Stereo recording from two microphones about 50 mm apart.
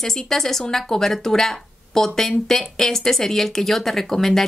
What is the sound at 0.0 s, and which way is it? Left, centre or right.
Speech, centre.